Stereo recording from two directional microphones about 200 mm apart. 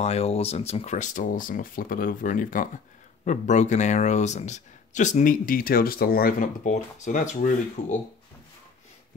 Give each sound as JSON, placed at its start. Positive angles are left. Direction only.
{"t": 0.0, "sound": "speech", "side_deg": 30}